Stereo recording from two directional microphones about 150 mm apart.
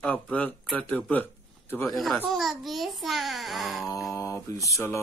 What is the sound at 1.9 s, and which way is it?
A child's voice, centre (ahead or behind).